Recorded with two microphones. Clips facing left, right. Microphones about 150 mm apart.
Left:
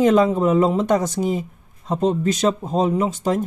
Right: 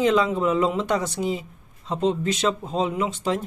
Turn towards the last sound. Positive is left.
turn(degrees=40)  # may be behind; listen again after turning